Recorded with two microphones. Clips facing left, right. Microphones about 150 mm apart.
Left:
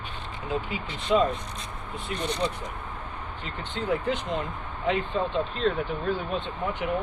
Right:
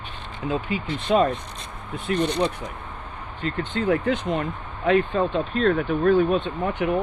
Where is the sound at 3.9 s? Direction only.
65° right (ahead or behind).